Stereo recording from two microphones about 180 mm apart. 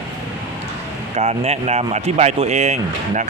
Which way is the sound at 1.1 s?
35° right (ahead or behind).